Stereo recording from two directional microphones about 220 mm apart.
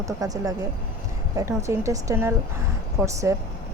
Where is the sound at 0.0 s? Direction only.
15° right (ahead or behind).